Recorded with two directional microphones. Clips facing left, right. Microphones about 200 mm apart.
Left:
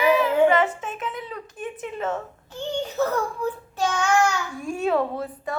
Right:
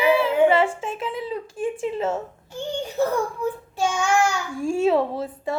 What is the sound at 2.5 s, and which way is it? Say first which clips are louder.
Child singing: even; 10° right (ahead or behind).